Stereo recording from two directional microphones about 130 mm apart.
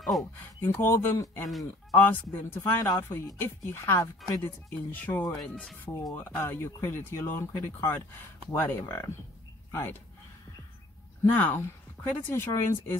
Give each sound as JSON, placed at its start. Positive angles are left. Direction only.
{"t": 0.0, "sound": "speech", "side_deg": 0}
{"t": 0.4, "sound": "speech", "side_deg": 15}
{"t": 1.5, "sound": "speech", "side_deg": 0}
{"t": 2.0, "sound": "speech", "side_deg": 15}
{"t": 6.1, "sound": "speech", "side_deg": 15}
{"t": 11.2, "sound": "speech", "side_deg": 15}